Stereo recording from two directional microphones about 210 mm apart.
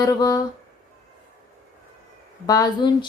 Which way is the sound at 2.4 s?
15° left (ahead or behind).